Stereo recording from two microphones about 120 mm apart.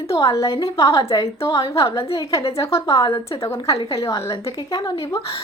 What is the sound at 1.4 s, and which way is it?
A woman's voice, 25° left (ahead or behind).